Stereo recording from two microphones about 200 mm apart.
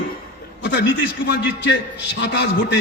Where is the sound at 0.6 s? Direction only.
60° left (ahead or behind).